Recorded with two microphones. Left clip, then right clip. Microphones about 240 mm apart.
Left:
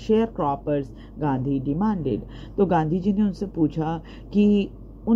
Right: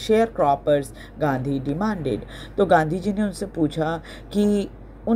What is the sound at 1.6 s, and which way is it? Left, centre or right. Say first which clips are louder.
Speech: right 2 dB; right.